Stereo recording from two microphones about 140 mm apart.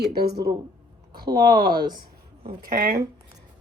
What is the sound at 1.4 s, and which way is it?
Speech, 90° right.